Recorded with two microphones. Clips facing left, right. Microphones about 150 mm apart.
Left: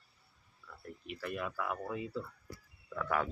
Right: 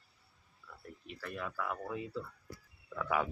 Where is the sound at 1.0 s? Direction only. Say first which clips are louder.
Left 3 dB; 5° left (ahead or behind).